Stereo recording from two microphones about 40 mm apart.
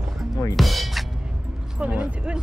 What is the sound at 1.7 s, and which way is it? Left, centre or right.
Speech, right.